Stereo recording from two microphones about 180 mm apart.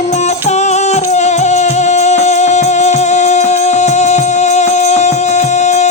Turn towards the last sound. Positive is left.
turn(degrees=40)  # may be behind; listen again after turning